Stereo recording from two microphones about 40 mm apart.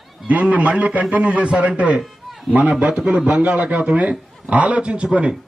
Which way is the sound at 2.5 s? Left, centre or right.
Right.